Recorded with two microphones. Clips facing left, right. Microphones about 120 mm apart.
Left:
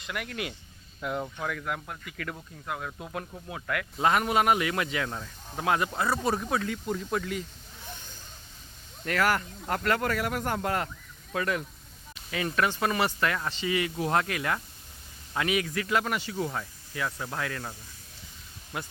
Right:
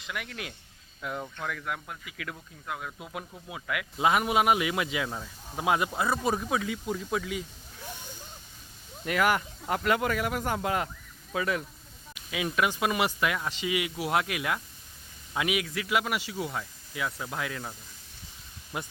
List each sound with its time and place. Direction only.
0.0 s speech: centre (ahead or behind)
7.9 s vehicle: 15° right (ahead or behind)
9.0 s speech: 10° right (ahead or behind)
18.7 s speech: 20° right (ahead or behind)